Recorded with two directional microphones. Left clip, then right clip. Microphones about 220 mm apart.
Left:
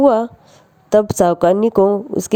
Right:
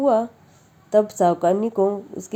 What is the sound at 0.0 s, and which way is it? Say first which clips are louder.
A woman's voice: left 6 dB; 40° left (ahead or behind).